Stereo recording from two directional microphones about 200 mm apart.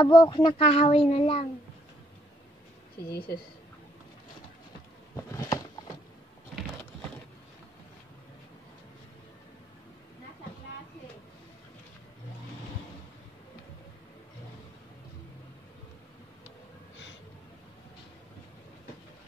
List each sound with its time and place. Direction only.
0.0 s speech: 20° left (ahead or behind)
3.1 s a woman's voice: 50° left (ahead or behind)
5.1 s a sound: 15° left (ahead or behind)